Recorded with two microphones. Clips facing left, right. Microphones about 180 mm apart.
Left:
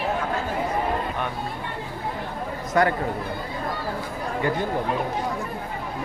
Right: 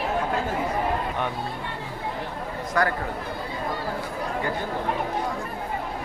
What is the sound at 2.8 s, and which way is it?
Speech, 25° left (ahead or behind).